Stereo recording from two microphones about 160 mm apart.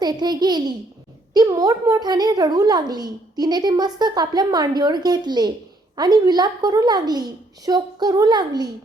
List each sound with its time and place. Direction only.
0.0 s a woman's voice: 25° right (ahead or behind)